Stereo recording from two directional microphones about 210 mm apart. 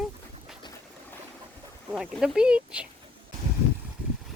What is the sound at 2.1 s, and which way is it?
Speech, 5° right (ahead or behind).